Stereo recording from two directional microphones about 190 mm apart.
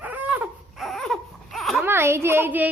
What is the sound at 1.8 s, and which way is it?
Speech, 10° right (ahead or behind).